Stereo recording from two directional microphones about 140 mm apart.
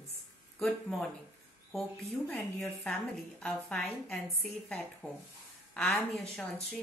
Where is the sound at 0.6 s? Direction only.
5° left (ahead or behind).